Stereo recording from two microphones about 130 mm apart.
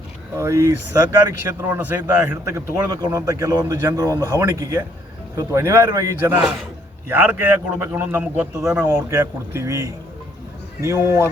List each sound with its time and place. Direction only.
0.3 s a man's voice: 20° right (ahead or behind)
2.0 s a man's voice: 25° right (ahead or behind)